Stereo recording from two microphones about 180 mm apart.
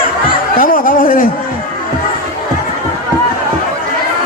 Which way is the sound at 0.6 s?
50° left (ahead or behind).